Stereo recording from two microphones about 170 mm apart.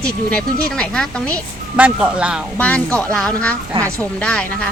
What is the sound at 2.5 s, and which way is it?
Speech, 10° left (ahead or behind).